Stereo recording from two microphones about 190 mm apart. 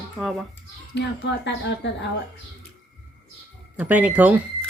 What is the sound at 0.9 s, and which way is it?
Speech, 65° left (ahead or behind).